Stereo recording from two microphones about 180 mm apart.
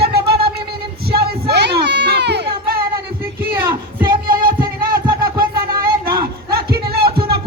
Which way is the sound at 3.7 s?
25° right (ahead or behind).